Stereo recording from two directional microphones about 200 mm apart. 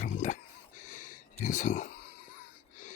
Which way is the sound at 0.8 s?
40° left (ahead or behind).